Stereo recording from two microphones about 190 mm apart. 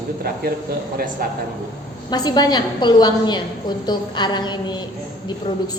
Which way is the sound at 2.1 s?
20° left (ahead or behind).